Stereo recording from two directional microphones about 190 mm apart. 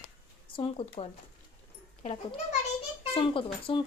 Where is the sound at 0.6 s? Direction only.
30° left (ahead or behind).